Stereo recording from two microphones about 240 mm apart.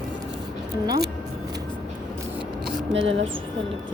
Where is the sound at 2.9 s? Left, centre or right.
Right.